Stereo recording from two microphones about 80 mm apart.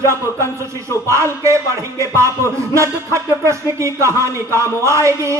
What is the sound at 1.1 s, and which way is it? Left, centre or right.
Speech, right.